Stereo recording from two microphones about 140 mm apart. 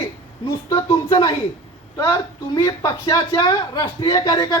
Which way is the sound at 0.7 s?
25° left (ahead or behind).